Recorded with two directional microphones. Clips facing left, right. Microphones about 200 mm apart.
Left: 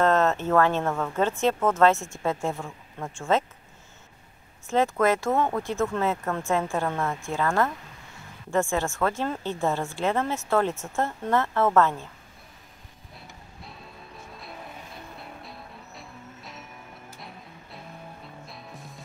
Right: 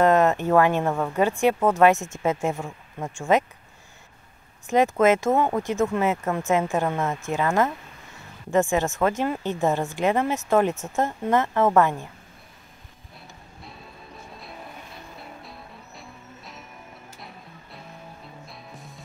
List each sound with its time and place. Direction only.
0.0 s speech: 15° right (ahead or behind)
4.6 s speech: 15° right (ahead or behind)
15.4 s music: centre (ahead or behind)
18.5 s music: centre (ahead or behind)